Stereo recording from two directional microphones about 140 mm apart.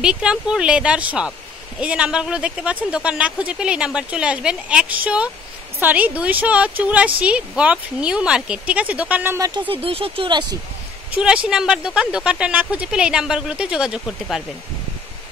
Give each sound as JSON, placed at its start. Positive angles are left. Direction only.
{"t": 0.0, "sound": "speech", "side_deg": -5}
{"t": 9.7, "sound": "speech", "side_deg": -40}
{"t": 11.1, "sound": "speech", "side_deg": -5}